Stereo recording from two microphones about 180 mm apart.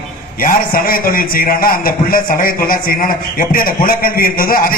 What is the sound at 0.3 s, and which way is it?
A man's voice, 50° left (ahead or behind).